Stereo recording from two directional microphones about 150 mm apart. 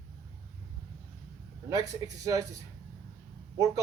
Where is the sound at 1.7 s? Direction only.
25° right (ahead or behind).